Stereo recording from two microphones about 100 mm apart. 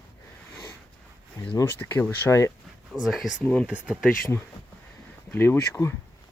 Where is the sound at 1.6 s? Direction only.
25° left (ahead or behind).